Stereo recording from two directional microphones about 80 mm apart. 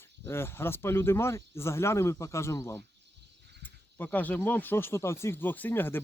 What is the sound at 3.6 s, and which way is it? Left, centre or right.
Cricket, left.